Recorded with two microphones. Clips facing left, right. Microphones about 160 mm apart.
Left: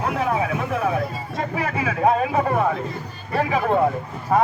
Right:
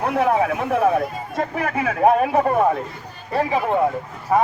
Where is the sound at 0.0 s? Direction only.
60° right (ahead or behind).